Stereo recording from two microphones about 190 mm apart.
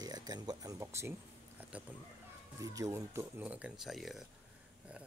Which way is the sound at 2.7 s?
15° right (ahead or behind).